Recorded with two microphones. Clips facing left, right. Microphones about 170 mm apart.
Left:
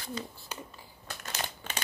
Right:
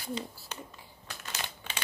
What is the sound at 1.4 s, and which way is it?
Crumpling, 45° left (ahead or behind).